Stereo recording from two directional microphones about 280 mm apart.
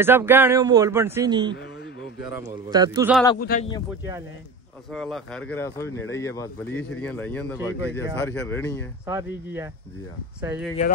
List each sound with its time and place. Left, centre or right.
0.0 s speech: centre
2.7 s speech: centre
3.3 s a man's voice: left
4.9 s speech: centre
9.0 s speech: centre